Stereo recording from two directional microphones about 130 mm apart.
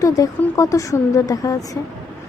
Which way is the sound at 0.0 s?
25° left (ahead or behind).